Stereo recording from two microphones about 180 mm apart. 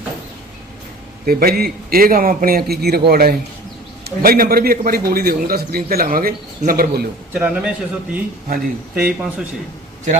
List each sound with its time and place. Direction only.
1.2 s a man's voice: 55° right (ahead or behind)
7.3 s a man's voice: 5° right (ahead or behind)